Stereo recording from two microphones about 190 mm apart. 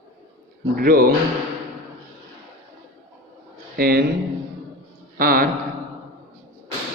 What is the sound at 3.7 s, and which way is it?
Speech, 55° right (ahead or behind).